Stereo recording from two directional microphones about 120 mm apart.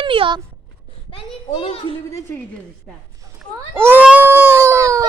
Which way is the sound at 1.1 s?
50° left (ahead or behind).